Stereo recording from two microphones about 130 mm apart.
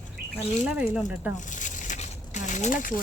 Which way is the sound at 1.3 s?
75° left (ahead or behind).